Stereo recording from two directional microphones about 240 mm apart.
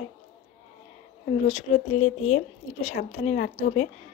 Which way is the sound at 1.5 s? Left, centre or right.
Left.